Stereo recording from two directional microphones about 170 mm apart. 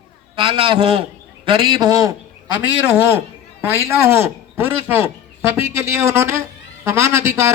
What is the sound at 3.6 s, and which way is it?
A man's voice, 15° right (ahead or behind).